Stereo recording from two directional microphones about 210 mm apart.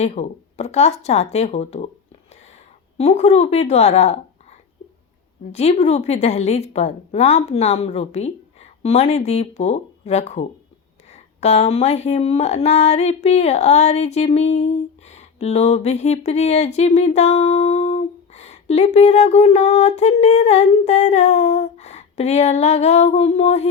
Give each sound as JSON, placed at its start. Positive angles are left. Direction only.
{"t": 0.0, "sound": "speech", "side_deg": 30}
{"t": 3.0, "sound": "speech", "side_deg": 30}
{"t": 5.5, "sound": "speech", "side_deg": 30}